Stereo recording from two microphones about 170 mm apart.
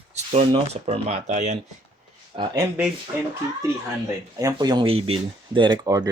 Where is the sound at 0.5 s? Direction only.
40° right (ahead or behind).